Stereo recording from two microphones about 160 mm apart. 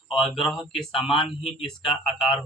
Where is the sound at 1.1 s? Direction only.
35° left (ahead or behind).